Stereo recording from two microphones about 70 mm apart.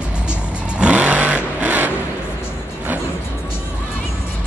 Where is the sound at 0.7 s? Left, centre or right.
Centre.